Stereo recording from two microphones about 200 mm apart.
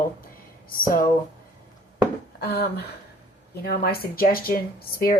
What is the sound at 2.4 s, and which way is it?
A woman's voice, 55° left (ahead or behind).